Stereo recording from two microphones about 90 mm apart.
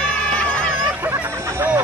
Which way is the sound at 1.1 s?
20° right (ahead or behind).